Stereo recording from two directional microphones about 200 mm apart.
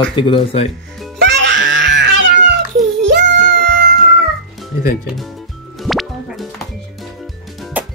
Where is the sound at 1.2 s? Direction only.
65° right (ahead or behind).